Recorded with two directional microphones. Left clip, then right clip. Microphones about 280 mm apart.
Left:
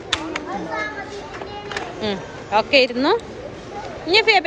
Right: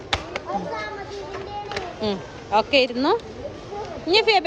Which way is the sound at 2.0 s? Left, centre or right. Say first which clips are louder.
Left 1 dB; centre.